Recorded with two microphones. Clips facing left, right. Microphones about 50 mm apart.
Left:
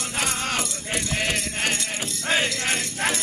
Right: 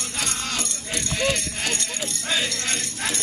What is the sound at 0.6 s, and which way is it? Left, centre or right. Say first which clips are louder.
Keys jangling: left 2 dB; centre.